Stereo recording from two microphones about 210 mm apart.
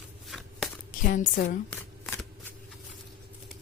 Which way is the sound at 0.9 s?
40° left (ahead or behind).